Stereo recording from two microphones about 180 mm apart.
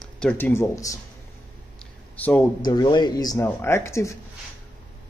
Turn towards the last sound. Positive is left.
turn(degrees=15)  # may be behind; listen again after turning